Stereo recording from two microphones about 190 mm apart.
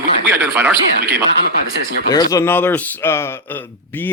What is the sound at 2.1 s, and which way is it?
A man's voice, 15° left (ahead or behind).